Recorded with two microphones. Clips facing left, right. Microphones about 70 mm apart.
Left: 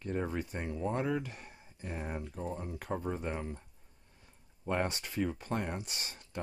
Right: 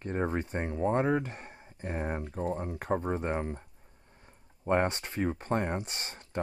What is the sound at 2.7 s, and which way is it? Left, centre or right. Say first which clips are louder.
Speech: right 6 dB; right.